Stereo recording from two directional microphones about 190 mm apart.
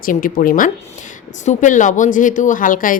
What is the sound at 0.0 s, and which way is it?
A woman's voice, 45° left (ahead or behind).